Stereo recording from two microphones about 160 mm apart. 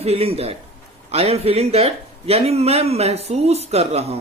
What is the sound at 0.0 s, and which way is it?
Speech, 40° right (ahead or behind).